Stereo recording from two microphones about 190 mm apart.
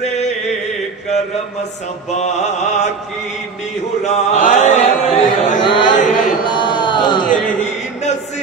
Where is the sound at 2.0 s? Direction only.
35° left (ahead or behind).